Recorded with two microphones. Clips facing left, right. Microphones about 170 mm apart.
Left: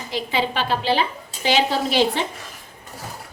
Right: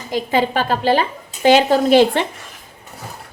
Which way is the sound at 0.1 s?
45° right (ahead or behind).